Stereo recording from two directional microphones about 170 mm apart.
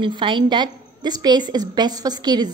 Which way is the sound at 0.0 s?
30° right (ahead or behind).